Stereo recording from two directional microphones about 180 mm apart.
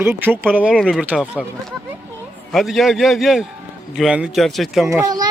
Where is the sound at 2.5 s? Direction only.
Centre (ahead or behind).